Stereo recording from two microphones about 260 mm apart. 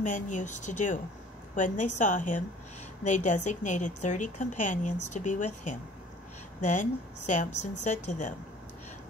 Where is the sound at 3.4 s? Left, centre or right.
Left.